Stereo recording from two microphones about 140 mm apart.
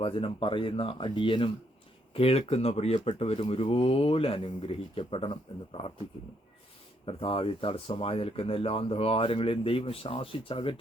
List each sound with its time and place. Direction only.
0.0 s speech: 40° left (ahead or behind)
7.0 s speech: 40° left (ahead or behind)